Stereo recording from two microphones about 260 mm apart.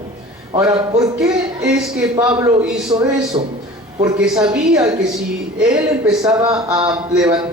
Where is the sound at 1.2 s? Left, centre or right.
Centre.